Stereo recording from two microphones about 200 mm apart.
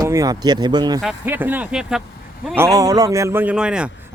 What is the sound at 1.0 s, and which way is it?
A man's voice, 5° right (ahead or behind).